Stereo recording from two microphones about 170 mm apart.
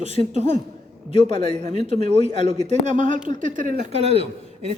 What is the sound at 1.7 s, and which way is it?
Speech, 35° left (ahead or behind).